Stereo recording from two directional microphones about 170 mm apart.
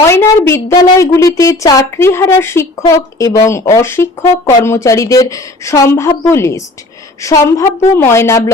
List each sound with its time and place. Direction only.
0.1 s a woman's voice: 15° left (ahead or behind)